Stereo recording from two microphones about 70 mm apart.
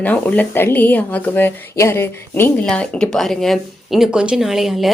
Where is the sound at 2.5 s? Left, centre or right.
Centre.